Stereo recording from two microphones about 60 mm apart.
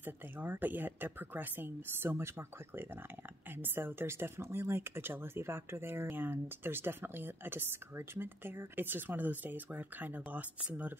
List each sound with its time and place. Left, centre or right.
0.0 s speech: right